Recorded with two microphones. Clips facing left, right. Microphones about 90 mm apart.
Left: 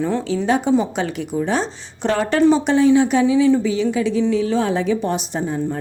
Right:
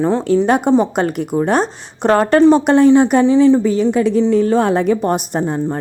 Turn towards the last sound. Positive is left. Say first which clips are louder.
# right 4 dB
turn(degrees=-55)  # may be behind; listen again after turning